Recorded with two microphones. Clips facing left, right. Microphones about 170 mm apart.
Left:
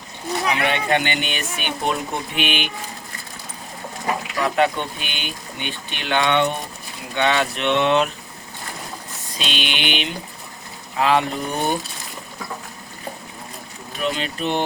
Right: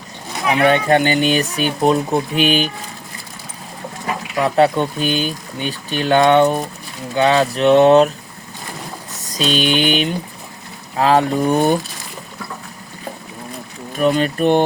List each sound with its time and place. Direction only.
0.5 s speech: 40° right (ahead or behind)
4.4 s speech: 35° right (ahead or behind)
9.2 s speech: 40° right (ahead or behind)
13.9 s speech: 45° right (ahead or behind)